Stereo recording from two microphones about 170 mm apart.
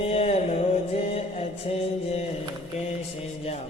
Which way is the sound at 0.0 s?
40° left (ahead or behind).